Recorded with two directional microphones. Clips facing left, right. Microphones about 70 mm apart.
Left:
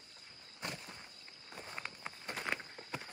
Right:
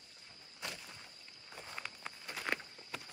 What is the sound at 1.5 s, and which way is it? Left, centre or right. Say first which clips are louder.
Run: left 1 dB; centre.